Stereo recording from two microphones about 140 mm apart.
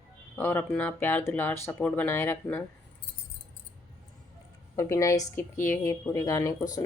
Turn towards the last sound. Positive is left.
turn(degrees=25)  # may be behind; listen again after turning